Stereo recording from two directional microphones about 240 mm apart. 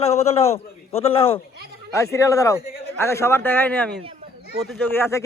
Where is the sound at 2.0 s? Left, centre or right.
Centre.